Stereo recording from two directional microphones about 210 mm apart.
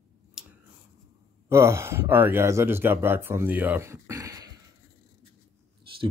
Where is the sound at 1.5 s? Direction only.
10° right (ahead or behind).